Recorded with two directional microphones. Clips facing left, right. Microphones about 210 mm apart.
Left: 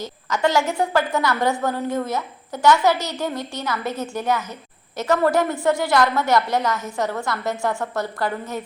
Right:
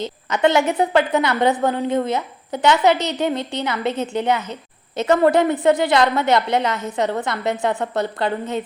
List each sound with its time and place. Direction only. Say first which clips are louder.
0.0 s a woman's voice: right 4 dB; 20° right (ahead or behind)